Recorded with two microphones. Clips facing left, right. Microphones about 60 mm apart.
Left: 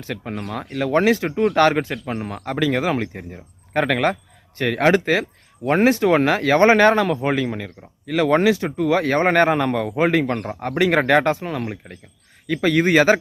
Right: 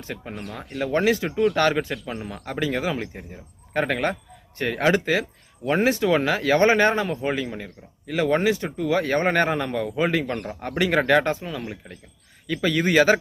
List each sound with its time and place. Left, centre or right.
0.0 s speech: left